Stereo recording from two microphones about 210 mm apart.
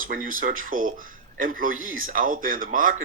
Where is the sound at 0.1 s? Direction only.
40° right (ahead or behind).